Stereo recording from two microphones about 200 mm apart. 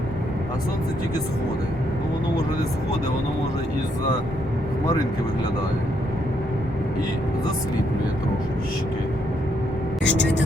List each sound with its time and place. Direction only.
10.0 s speech: 65° left (ahead or behind)